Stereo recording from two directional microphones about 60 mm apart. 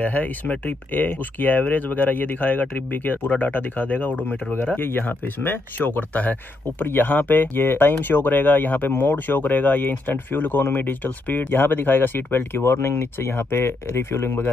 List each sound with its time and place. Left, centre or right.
0.0 s speech: left